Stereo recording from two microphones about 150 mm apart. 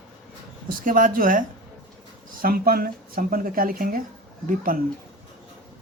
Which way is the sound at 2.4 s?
85° right.